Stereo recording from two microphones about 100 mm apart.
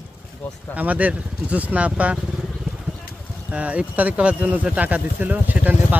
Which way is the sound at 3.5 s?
10° right (ahead or behind).